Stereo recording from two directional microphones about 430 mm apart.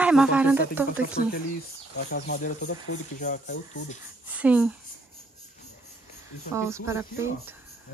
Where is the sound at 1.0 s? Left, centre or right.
Left.